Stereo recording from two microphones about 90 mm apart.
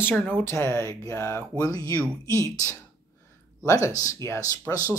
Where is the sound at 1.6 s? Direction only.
45° left (ahead or behind).